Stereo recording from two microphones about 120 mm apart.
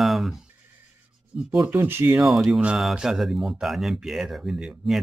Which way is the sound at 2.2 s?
Centre (ahead or behind).